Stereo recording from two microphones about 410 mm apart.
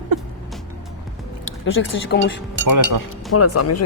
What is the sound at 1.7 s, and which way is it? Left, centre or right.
Speech, left.